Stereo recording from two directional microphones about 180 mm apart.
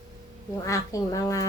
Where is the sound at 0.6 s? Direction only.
20° left (ahead or behind).